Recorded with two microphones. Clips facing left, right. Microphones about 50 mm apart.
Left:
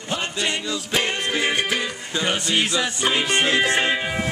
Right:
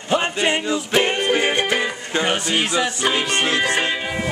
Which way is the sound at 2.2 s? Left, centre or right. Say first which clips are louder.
Even; centre.